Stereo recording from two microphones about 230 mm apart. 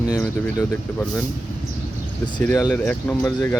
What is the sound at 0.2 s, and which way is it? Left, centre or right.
Speech, centre.